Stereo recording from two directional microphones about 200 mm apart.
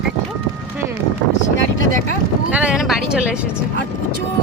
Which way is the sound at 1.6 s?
75° left (ahead or behind).